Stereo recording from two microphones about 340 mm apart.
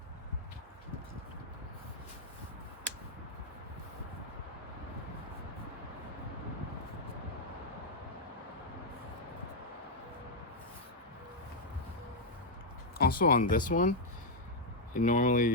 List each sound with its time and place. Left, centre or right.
13.0 s speech: left
14.9 s speech: left